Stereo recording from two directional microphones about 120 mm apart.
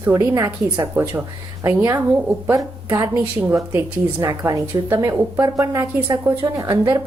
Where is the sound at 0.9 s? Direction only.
20° right (ahead or behind).